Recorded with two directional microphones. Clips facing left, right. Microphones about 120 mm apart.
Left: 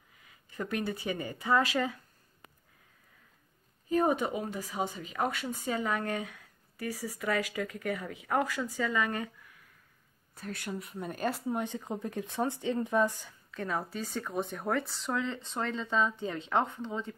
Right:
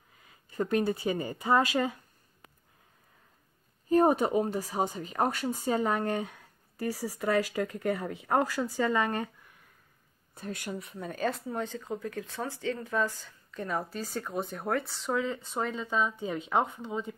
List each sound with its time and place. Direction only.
0.6 s speech: 30° right (ahead or behind)
3.9 s speech: 40° right (ahead or behind)
10.3 s speech: 20° right (ahead or behind)
10.7 s speech: centre (ahead or behind); by 13.3 s 20° left (ahead or behind)
13.5 s speech: centre (ahead or behind)